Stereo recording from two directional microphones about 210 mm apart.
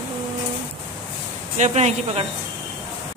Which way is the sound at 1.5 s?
35° right (ahead or behind).